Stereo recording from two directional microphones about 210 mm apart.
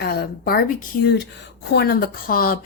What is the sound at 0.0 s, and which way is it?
Speech, 50° left (ahead or behind).